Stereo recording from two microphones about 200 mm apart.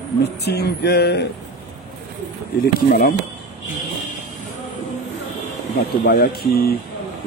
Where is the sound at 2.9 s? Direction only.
50° left (ahead or behind).